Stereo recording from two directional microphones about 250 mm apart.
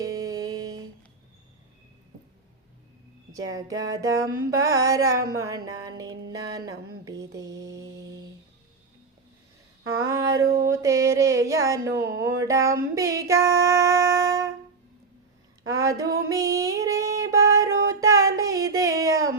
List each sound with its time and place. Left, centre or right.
0.0 s a sound: centre
3.3 s speech: centre
7.8 s mantra: centre
9.8 s a sound: right
10.1 s speech: centre
10.4 s a sound: right
10.7 s speech: centre
15.8 s speech: centre
16.3 s female singing: centre
17.8 s music: centre